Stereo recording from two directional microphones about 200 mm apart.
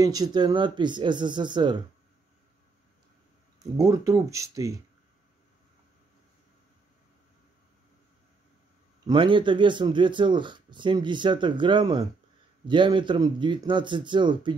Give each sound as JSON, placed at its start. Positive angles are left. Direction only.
{"t": 0.0, "sound": "speech", "side_deg": -20}
{"t": 3.5, "sound": "speech", "side_deg": -15}
{"t": 9.0, "sound": "speech", "side_deg": -25}